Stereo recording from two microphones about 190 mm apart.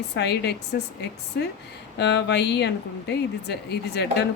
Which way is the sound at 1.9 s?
65° left (ahead or behind).